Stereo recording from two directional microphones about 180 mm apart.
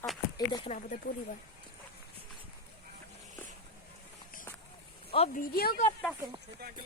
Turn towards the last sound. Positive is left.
turn(degrees=55)  # may be behind; listen again after turning